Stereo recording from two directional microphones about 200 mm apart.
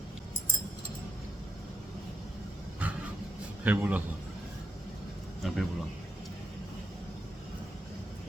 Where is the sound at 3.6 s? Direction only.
5° right (ahead or behind).